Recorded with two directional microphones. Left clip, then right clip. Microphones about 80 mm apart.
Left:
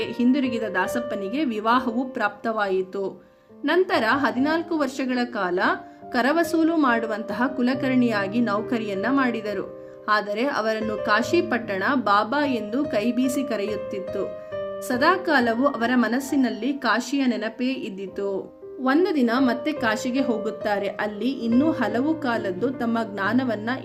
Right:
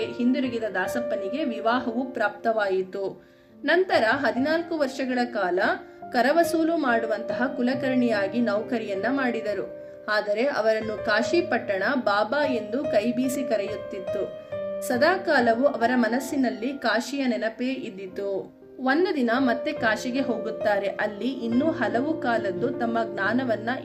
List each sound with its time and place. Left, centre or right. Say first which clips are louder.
0.0 s speech: left 3 dB; left
3.6 s speech: even; left
18.8 s speech: left 2 dB; left